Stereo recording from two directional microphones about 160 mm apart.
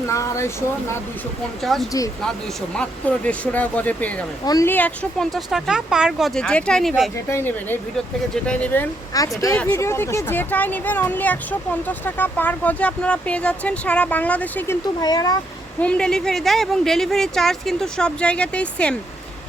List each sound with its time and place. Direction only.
0.1 s speech: 20° left (ahead or behind)
1.6 s speech: centre (ahead or behind)
4.4 s speech: 25° left (ahead or behind)
4.7 s speech: 5° left (ahead or behind)
7.3 s speech: 15° left (ahead or behind)
9.1 s speech: 20° left (ahead or behind)
15.0 s speech: 25° left (ahead or behind)
15.8 s speech: 5° left (ahead or behind)